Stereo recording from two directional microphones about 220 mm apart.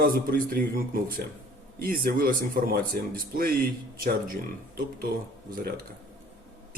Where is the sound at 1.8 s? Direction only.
40° right (ahead or behind).